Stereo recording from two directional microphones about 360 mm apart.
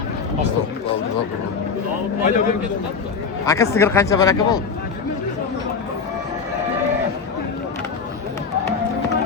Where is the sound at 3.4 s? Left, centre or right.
Centre.